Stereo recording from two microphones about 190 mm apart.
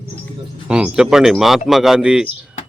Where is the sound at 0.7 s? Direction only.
5° right (ahead or behind).